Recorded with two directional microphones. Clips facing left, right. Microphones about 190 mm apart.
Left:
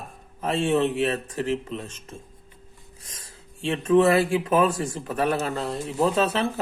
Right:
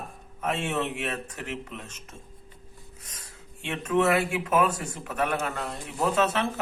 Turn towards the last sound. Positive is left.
turn(degrees=30)  # may be behind; listen again after turning